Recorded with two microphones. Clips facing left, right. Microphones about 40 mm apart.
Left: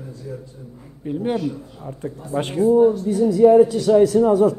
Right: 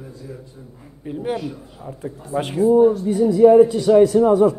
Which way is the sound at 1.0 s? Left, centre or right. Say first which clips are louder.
Left 3 dB; centre.